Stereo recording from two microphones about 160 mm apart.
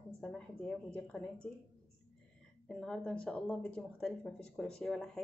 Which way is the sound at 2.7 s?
5° left (ahead or behind).